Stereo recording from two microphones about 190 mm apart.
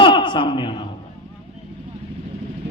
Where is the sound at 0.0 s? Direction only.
25° left (ahead or behind).